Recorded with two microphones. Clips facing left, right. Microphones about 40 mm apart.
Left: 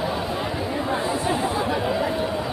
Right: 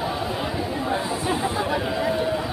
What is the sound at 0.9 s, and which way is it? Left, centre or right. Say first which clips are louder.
Chatter: left 2 dB; centre.